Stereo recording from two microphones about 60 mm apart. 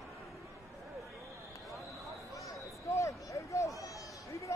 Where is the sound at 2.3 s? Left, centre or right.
Left.